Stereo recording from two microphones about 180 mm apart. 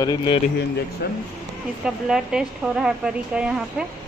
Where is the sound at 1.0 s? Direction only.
65° left (ahead or behind).